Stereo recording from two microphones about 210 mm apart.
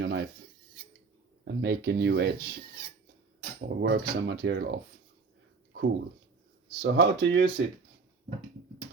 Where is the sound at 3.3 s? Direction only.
50° right (ahead or behind).